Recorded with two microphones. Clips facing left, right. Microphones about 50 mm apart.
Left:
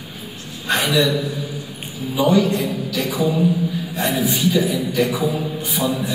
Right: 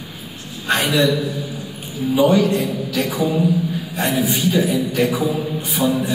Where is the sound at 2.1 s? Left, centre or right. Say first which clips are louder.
Right 1 dB; right.